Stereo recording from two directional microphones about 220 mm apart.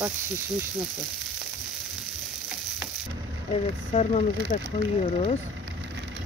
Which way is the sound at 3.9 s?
30° left (ahead or behind).